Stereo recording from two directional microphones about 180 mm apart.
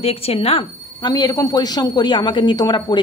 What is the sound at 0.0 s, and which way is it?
A man's voice, 35° left (ahead or behind).